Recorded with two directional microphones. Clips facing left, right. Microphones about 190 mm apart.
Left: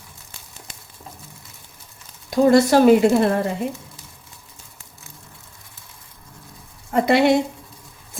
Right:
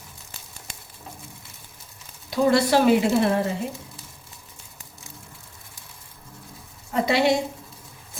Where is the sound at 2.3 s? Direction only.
45° left (ahead or behind).